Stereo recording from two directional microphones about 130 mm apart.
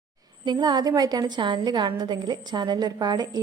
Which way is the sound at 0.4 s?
30° right (ahead or behind).